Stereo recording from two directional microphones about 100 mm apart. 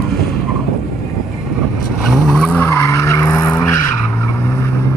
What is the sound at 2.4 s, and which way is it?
Skidding, 20° left (ahead or behind).